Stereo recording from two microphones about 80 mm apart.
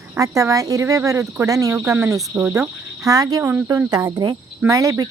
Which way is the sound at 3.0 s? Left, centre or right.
Right.